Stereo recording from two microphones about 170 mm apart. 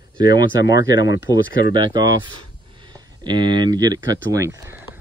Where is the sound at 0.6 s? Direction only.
20° right (ahead or behind).